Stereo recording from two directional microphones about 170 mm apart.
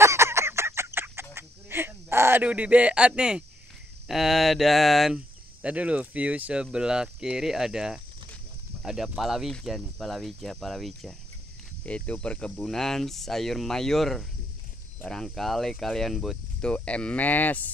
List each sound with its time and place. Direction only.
0.0 s fowl: 15° right (ahead or behind)
1.3 s a sound: 15° right (ahead or behind)
4.1 s speech: centre (ahead or behind)